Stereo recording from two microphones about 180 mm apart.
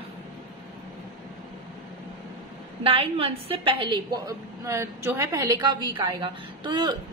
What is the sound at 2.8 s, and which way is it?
A woman's voice, 30° right (ahead or behind).